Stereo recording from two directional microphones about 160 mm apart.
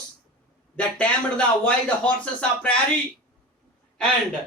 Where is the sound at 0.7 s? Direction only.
10° left (ahead or behind).